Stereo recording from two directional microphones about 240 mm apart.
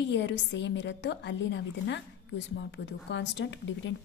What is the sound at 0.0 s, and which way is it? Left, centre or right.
A woman's voice, left.